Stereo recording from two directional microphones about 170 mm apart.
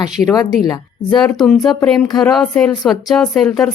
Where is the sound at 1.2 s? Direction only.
Centre (ahead or behind).